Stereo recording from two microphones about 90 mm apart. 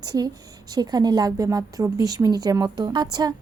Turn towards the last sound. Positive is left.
turn(degrees=-50)  # may be behind; listen again after turning